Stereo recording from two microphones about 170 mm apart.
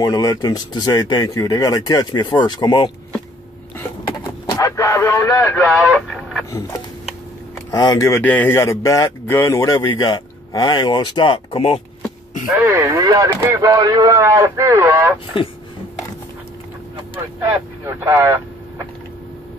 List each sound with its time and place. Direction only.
0.0 s speech: 20° left (ahead or behind)
4.5 s a sound: 20° left (ahead or behind)
5.7 s speech: centre (ahead or behind)
7.7 s speech: 20° left (ahead or behind)
12.4 s speech: 10° right (ahead or behind)
16.9 s vehicle: 15° right (ahead or behind)